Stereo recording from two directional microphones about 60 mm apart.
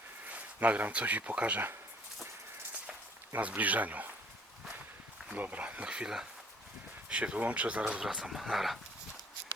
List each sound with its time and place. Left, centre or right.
0.3 s speech: right
3.3 s speech: right
5.3 s speech: right
8.0 s speech: centre